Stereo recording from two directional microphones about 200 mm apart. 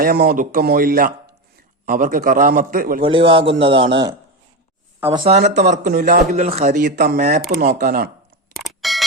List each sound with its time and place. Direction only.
0.0 s a man's voice: 50° right (ahead or behind)
3.0 s a man's voice: 25° right (ahead or behind)
5.9 s a man's voice: 50° right (ahead or behind)
6.3 s speech: 35° right (ahead or behind)
7.2 s speech: 35° right (ahead or behind)
7.5 s a man's voice: 45° right (ahead or behind)
8.5 s a sound: centre (ahead or behind)